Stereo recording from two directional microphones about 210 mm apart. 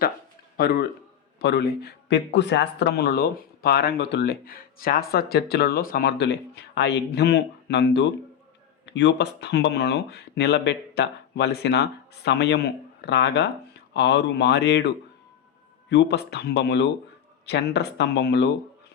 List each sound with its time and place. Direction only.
0.5 s a man's voice: 50° left (ahead or behind)